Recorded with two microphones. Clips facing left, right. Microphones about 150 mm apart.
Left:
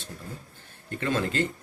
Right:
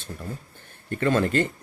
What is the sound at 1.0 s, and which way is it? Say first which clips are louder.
Speech: right 5 dB; 55° right (ahead or behind).